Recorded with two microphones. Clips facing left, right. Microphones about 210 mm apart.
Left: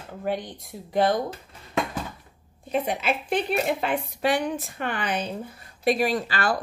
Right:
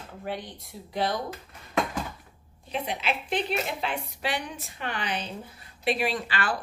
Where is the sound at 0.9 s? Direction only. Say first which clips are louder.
Left 7 dB; 50° left (ahead or behind).